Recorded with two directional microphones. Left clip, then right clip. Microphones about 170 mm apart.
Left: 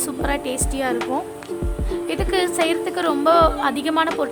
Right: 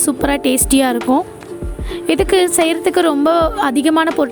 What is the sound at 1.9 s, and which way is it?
Speech, 45° right (ahead or behind).